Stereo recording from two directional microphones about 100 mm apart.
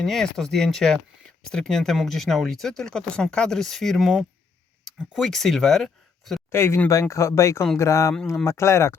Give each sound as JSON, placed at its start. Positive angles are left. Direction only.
{"t": 0.0, "sound": "speech", "side_deg": 5}
{"t": 6.5, "sound": "speech", "side_deg": 25}